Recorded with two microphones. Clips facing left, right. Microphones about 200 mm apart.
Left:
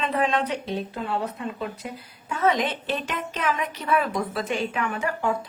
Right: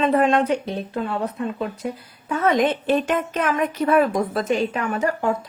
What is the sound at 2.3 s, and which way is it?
A woman's voice, 55° right (ahead or behind).